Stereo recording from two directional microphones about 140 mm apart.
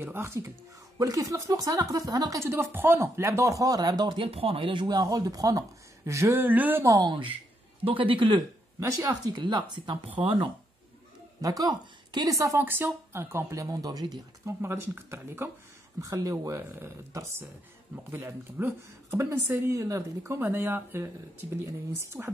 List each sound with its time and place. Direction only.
0.0 s a woman's voice: 15° right (ahead or behind); by 8.4 s 35° right (ahead or behind)
8.7 s speech: 25° right (ahead or behind)
11.4 s a woman's voice: 25° right (ahead or behind)